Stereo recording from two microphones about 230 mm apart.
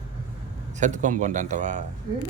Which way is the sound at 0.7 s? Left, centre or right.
Right.